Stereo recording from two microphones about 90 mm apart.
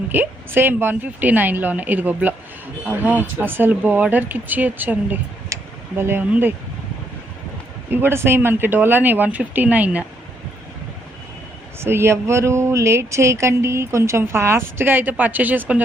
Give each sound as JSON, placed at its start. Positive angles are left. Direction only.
{"t": 0.1, "sound": "a woman's voice", "side_deg": -25}
{"t": 5.5, "sound": "a sound", "side_deg": -35}
{"t": 6.0, "sound": "a woman's voice", "side_deg": -25}
{"t": 7.9, "sound": "a woman's voice", "side_deg": -25}
{"t": 11.8, "sound": "a woman's voice", "side_deg": -30}